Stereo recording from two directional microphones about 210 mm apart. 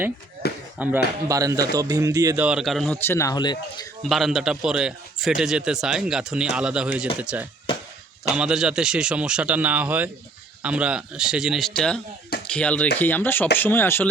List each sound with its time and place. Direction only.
0.4 s speech: 50° left (ahead or behind)
0.8 s speech: 5° right (ahead or behind); by 3.6 s 20° left (ahead or behind)
4.1 s a man's voice: centre (ahead or behind)